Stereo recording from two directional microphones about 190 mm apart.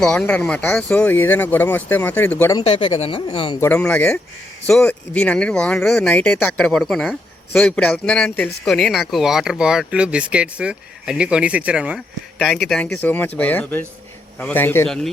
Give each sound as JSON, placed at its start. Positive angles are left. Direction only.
{"t": 0.0, "sound": "speech", "side_deg": 5}
{"t": 2.6, "sound": "speech", "side_deg": 30}
{"t": 3.6, "sound": "speech", "side_deg": 10}